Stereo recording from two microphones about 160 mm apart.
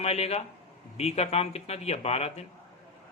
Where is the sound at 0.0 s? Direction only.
40° left (ahead or behind).